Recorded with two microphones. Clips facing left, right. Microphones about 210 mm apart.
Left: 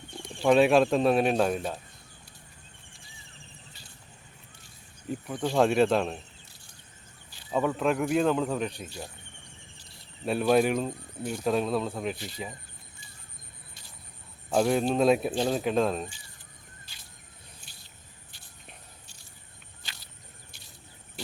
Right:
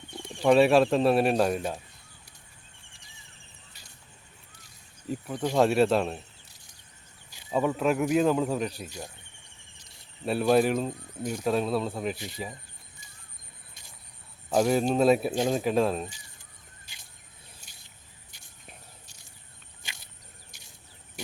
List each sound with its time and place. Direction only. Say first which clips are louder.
0.4 s speech: right 1 dB; 5° right (ahead or behind)
5.5 s speech: even; centre (ahead or behind)
7.3 s speech: right 1 dB; 10° right (ahead or behind)
10.2 s speech: right 1 dB; centre (ahead or behind)
14.5 s speech: right 1 dB; 5° right (ahead or behind)
17.6 s a sound: left 2 dB; 40° right (ahead or behind)